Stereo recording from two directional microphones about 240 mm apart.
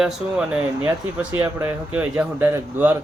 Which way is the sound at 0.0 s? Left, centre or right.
Centre.